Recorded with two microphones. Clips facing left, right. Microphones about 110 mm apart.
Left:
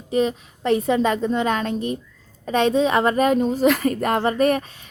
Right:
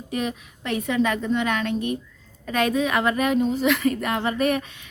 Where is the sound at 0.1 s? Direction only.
30° left (ahead or behind).